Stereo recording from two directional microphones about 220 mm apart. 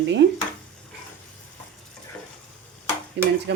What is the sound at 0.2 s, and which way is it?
Speech, 50° right (ahead or behind).